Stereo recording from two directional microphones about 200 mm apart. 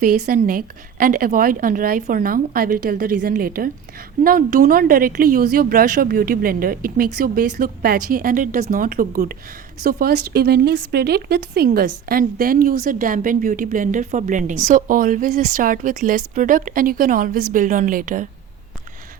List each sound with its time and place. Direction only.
0.0 s speech: 45° right (ahead or behind)